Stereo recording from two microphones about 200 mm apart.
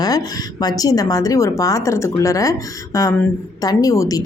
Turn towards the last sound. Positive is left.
turn(degrees=15)  # may be behind; listen again after turning